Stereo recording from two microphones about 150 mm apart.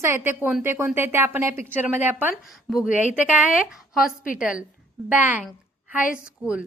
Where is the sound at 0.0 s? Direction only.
15° right (ahead or behind).